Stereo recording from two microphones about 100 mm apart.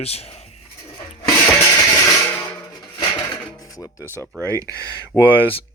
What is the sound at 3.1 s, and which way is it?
Music, 40° left (ahead or behind).